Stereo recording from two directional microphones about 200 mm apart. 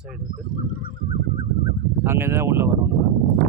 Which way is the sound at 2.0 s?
10° right (ahead or behind).